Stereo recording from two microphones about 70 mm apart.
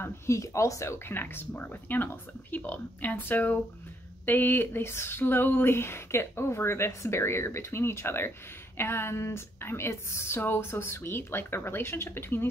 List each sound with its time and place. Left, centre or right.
0.0 s speech: left